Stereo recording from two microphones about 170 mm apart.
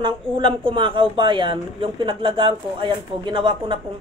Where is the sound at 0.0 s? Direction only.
30° right (ahead or behind).